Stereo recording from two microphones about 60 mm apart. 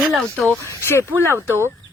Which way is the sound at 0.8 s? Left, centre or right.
Left.